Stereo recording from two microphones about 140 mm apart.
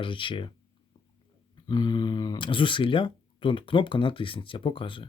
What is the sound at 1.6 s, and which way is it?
Speech, 30° left (ahead or behind).